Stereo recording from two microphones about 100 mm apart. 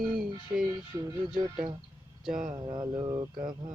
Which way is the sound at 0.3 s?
55° right (ahead or behind).